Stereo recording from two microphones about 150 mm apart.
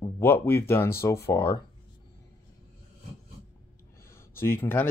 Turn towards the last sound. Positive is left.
turn(degrees=15)  # may be behind; listen again after turning